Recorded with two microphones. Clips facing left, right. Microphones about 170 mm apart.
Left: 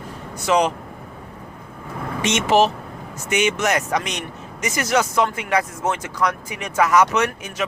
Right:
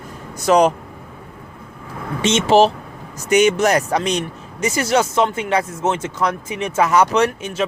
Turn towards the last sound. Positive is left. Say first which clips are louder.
# right 4 dB
turn(degrees=-30)  # may be behind; listen again after turning